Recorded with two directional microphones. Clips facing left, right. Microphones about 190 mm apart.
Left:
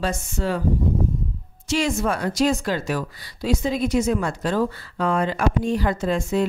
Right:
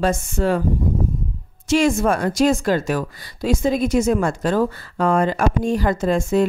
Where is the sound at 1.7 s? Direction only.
50° right (ahead or behind).